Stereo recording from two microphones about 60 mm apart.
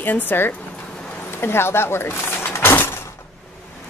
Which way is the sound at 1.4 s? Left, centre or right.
Left.